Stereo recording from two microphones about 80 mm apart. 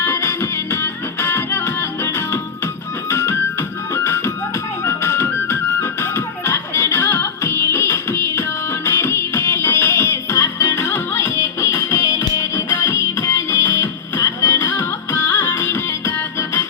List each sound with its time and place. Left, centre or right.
0.0 s music: left
3.1 s music: left
12.0 s music: left